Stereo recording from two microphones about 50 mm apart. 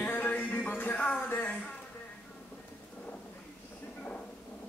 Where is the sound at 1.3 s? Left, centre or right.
Left.